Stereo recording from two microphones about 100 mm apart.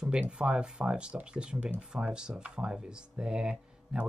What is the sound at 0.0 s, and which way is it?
Speech, 10° right (ahead or behind).